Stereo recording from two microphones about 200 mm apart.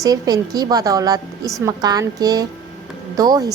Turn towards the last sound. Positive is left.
turn(degrees=-20)  # may be behind; listen again after turning